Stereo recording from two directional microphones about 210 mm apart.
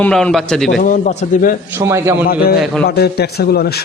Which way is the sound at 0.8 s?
40° left (ahead or behind).